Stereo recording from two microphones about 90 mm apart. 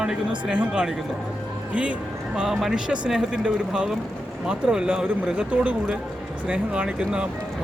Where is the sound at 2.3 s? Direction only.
5° right (ahead or behind).